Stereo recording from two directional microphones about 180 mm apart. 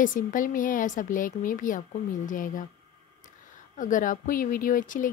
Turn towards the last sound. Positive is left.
turn(degrees=45)  # may be behind; listen again after turning